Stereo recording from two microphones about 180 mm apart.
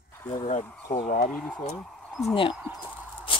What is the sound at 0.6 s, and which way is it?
Speech, 10° left (ahead or behind).